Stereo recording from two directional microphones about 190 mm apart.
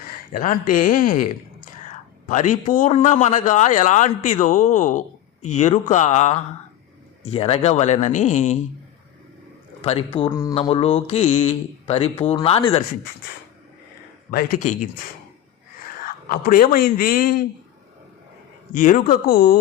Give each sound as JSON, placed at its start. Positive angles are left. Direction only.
{"t": 0.3, "sound": "a man's voice", "side_deg": 45}
{"t": 9.8, "sound": "speech", "side_deg": 30}
{"t": 14.3, "sound": "speech", "side_deg": 50}
{"t": 16.0, "sound": "speech", "side_deg": 45}
{"t": 18.7, "sound": "speech", "side_deg": 40}